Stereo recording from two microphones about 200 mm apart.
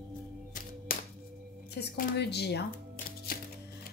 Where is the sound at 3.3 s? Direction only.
50° left (ahead or behind).